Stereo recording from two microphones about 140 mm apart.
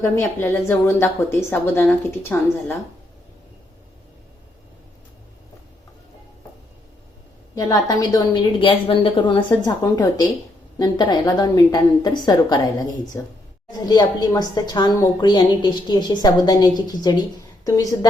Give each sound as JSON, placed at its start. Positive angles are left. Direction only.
{"t": 0.0, "sound": "a woman's voice", "side_deg": 15}
{"t": 7.5, "sound": "a woman's voice", "side_deg": 25}